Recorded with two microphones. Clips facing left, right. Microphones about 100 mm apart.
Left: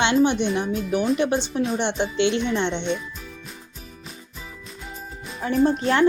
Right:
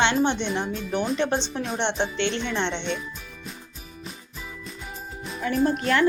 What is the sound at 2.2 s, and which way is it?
Speech, 15° left (ahead or behind).